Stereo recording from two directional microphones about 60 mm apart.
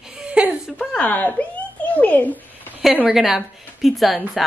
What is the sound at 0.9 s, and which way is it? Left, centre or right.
Speech, left.